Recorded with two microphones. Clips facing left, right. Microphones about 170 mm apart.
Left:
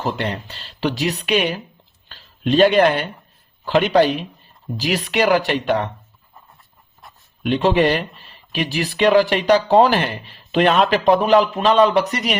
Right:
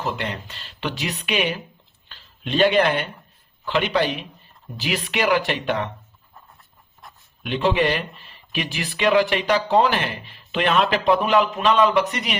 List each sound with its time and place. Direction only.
0.0 s speech: 35° left (ahead or behind)
7.4 s speech: 40° left (ahead or behind)